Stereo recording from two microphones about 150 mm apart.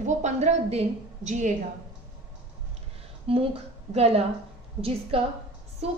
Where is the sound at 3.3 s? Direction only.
40° right (ahead or behind).